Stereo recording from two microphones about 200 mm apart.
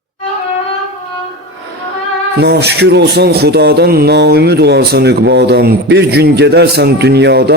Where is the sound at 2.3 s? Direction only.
55° right (ahead or behind).